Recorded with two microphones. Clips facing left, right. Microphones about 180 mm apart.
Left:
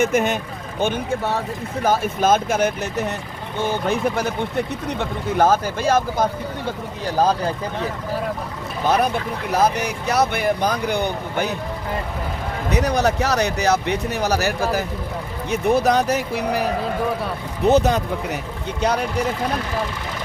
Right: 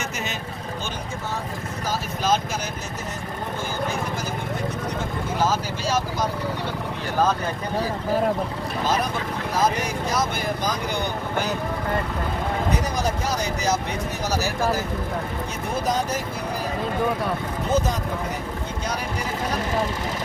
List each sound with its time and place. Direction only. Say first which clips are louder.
0.0 s speech: left 12 dB; 55° left (ahead or behind)
7.2 s speech: left 3 dB; 35° left (ahead or behind)
9.5 s speech: left 4 dB; 65° left (ahead or behind)
12.7 s speech: left 6 dB; 70° left (ahead or behind)
17.7 s speech: left 8 dB; 70° left (ahead or behind)